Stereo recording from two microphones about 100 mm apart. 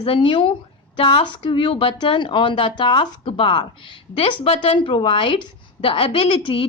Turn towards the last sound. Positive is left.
turn(degrees=60)  # may be behind; listen again after turning